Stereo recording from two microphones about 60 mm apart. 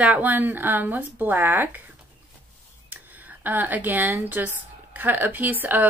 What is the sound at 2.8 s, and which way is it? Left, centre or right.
Speech, right.